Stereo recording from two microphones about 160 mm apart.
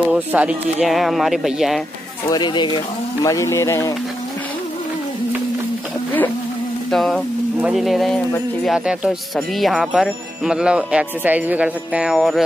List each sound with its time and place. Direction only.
0.0 s speech: 10° right (ahead or behind)
2.2 s speech: 25° left (ahead or behind)
6.9 s speech: centre (ahead or behind)